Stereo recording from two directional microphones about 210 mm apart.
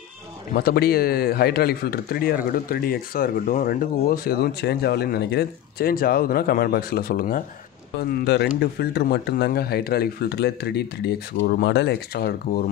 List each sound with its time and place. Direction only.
0.6 s speech: 50° left (ahead or behind)